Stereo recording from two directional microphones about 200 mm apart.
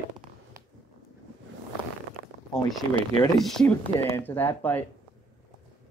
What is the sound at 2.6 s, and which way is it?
Speech, 20° left (ahead or behind).